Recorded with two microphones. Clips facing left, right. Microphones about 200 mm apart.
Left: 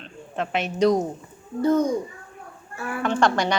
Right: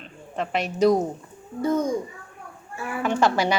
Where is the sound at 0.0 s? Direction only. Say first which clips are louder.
Left 1 dB; centre (ahead or behind).